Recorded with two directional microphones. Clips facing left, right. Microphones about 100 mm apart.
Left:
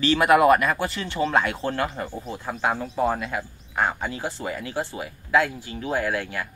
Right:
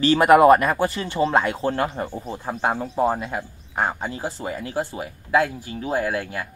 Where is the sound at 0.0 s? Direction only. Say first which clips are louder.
Right 4 dB; 35° right (ahead or behind).